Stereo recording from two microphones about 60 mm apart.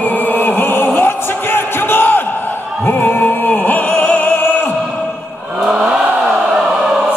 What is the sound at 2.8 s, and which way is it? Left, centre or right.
Opera, left.